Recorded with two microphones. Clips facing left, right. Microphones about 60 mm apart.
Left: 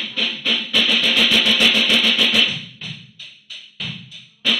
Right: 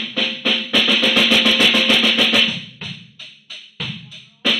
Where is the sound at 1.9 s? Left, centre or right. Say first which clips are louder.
Right 1 dB; centre.